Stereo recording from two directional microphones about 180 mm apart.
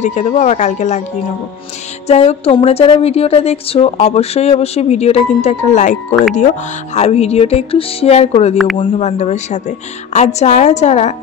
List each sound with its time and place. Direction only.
0.0 s speech: 40° left (ahead or behind)
2.0 s speech: 35° left (ahead or behind)